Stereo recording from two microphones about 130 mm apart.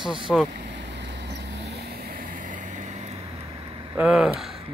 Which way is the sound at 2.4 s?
85° right.